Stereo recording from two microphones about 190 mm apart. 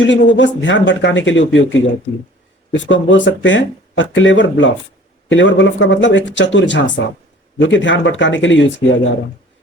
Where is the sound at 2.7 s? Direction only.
75° left (ahead or behind).